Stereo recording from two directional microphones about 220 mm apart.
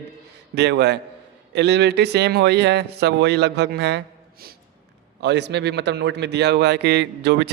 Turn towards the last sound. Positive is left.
turn(degrees=-50)  # may be behind; listen again after turning